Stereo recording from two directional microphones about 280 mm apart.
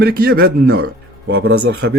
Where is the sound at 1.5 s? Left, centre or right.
Right.